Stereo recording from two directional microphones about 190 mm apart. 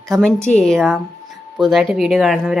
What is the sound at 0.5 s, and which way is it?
Speech, centre (ahead or behind).